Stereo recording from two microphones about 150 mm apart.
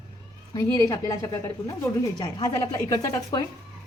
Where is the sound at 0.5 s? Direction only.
20° left (ahead or behind).